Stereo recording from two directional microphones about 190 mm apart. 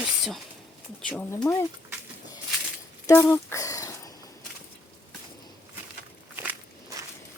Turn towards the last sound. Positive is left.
turn(degrees=-10)  # may be behind; listen again after turning